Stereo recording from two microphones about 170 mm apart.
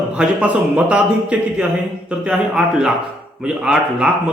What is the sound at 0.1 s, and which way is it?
Speech, 10° right (ahead or behind).